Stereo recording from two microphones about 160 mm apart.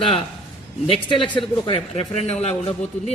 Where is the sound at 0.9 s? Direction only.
30° left (ahead or behind).